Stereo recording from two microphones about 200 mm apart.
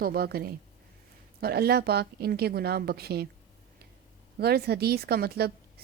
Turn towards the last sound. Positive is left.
turn(degrees=-50)  # may be behind; listen again after turning